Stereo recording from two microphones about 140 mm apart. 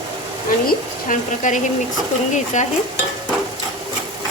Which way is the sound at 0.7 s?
70° left (ahead or behind).